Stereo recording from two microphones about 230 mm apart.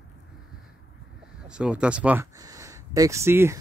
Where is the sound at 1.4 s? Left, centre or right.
Centre.